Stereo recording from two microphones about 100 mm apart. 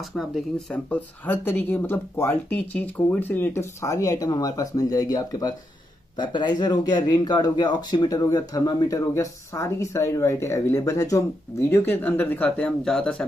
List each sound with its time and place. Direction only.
0.1 s speech: 5° left (ahead or behind)
0.8 s speech: 15° left (ahead or behind); by 5.5 s 40° left (ahead or behind)
6.1 s speech: 50° left (ahead or behind); by 11.2 s 35° left (ahead or behind)
11.6 s speech: 20° left (ahead or behind); by 13.2 s 5° left (ahead or behind)